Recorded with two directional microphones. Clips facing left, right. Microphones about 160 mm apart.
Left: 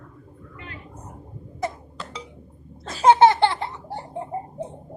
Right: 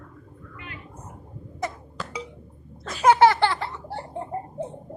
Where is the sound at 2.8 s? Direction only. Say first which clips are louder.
Left 2 dB; 30° left (ahead or behind).